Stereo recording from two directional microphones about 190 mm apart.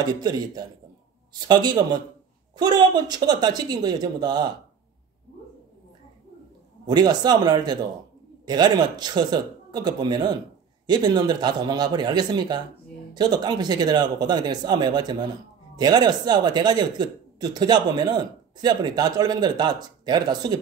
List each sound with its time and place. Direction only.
0.0 s speech: 20° right (ahead or behind)
6.9 s speech: 20° right (ahead or behind)